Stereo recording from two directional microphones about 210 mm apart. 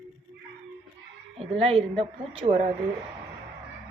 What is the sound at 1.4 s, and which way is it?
Speech, 30° right (ahead or behind).